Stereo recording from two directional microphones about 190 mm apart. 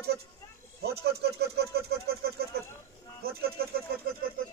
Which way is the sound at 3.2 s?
55° right (ahead or behind).